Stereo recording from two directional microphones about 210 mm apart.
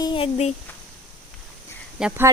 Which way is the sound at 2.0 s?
10° right (ahead or behind).